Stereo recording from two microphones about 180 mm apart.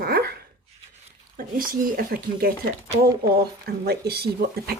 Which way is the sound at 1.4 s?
50° right (ahead or behind).